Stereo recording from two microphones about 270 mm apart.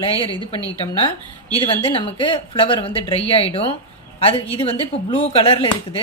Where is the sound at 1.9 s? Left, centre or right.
Centre.